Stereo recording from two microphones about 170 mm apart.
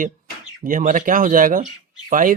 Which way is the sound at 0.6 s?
50° right (ahead or behind).